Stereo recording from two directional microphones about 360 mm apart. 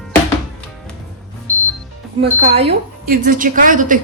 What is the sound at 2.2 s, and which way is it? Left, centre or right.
A woman's voice, right.